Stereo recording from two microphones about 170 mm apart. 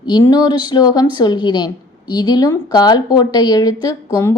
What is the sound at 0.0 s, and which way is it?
A woman's voice, 25° left (ahead or behind).